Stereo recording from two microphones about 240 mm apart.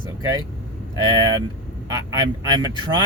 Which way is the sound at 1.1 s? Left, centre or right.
Centre.